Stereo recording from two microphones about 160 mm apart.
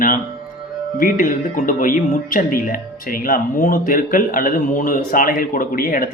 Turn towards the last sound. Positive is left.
turn(degrees=60)  # may be behind; listen again after turning